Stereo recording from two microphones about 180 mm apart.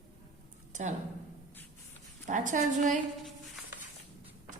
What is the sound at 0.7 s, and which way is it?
Speech, 45° right (ahead or behind).